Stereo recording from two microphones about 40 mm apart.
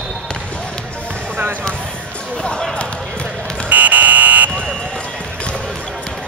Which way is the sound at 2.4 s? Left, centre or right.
Left.